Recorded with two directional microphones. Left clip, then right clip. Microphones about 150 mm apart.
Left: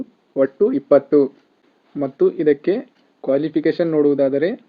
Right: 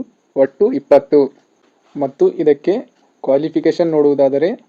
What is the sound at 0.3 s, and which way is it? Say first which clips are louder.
Speech: right 3 dB; 15° right (ahead or behind).